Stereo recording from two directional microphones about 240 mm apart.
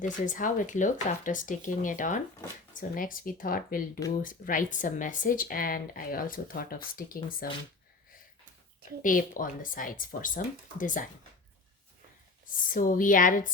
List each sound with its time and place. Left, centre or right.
0.0 s speech: left
8.8 s speech: left
12.7 s speech: left